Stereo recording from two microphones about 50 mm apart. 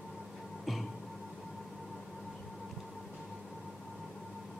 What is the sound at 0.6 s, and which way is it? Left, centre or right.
Music, centre.